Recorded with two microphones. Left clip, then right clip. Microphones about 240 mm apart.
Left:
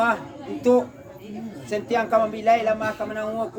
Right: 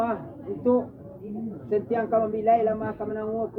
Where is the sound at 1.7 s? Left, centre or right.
Left.